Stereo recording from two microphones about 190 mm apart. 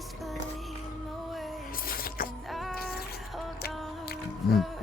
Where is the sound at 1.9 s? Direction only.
50° left (ahead or behind).